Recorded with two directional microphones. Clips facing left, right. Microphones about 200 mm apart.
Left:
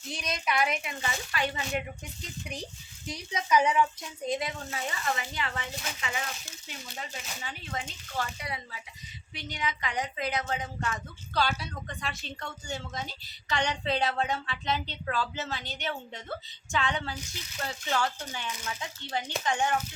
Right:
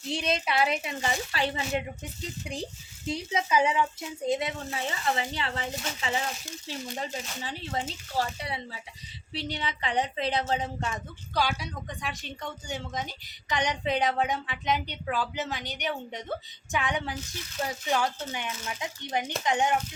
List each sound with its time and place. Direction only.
0.1 s speech: 25° right (ahead or behind)
11.3 s a woman's voice: 15° right (ahead or behind)